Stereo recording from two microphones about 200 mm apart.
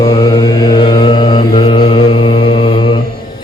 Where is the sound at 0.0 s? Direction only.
20° left (ahead or behind).